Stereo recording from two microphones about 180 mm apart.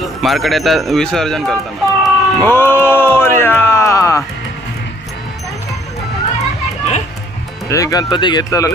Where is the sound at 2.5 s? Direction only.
10° left (ahead or behind).